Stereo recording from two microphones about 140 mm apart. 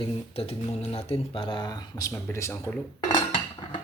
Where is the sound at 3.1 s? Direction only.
35° left (ahead or behind).